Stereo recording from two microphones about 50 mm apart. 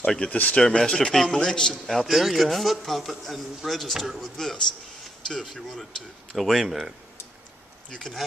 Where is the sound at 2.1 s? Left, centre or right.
Centre.